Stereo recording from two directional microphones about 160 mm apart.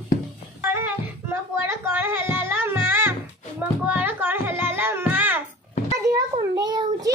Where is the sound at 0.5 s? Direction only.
15° right (ahead or behind).